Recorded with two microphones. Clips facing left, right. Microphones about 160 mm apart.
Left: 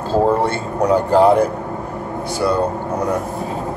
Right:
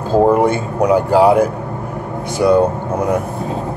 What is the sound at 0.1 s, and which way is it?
Speech, 15° right (ahead or behind).